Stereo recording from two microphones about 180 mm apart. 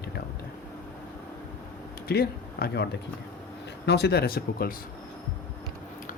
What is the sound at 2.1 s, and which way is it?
Speech, 60° left (ahead or behind).